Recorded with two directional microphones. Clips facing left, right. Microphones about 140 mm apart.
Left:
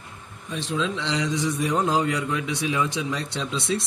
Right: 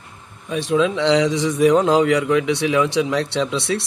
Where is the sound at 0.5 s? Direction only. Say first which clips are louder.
Right 9 dB; 70° right (ahead or behind).